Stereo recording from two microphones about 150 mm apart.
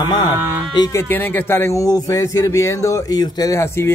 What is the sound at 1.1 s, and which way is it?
Speech, 15° left (ahead or behind).